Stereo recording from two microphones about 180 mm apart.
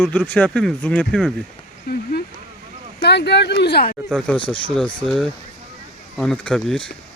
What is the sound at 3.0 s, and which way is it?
Speech, 70° left (ahead or behind).